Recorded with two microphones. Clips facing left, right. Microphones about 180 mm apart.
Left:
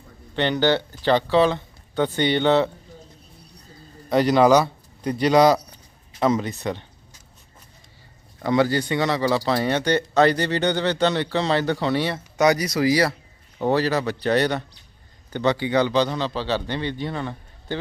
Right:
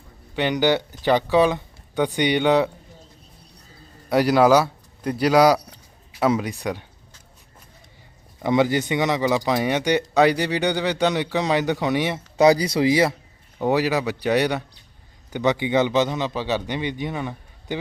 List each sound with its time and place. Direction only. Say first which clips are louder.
0.3 s speech: even; 10° right (ahead or behind)
4.1 s speech: even; 5° right (ahead or behind)
8.4 s speech: right 1 dB; 20° right (ahead or behind)
12.4 s speech: right 3 dB; 30° right (ahead or behind)